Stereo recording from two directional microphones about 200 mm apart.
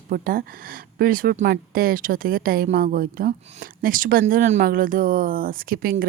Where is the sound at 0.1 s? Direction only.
45° right (ahead or behind).